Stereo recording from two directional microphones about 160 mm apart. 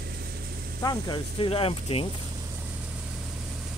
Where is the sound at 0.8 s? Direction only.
25° left (ahead or behind).